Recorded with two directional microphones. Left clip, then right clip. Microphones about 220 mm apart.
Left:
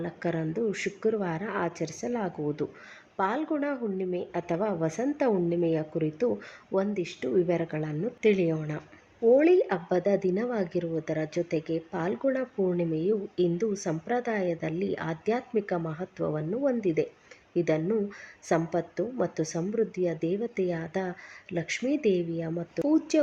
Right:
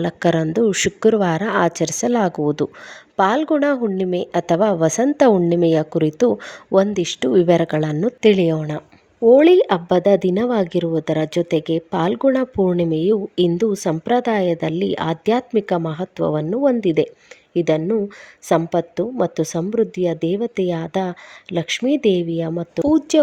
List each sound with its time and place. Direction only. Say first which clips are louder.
0.0 s a woman's voice: right 13 dB; 45° right (ahead or behind)